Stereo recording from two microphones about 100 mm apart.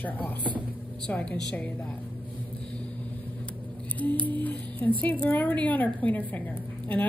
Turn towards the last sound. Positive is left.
turn(degrees=15)  # may be behind; listen again after turning